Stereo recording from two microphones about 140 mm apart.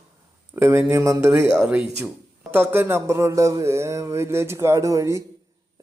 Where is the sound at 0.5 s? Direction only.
15° right (ahead or behind).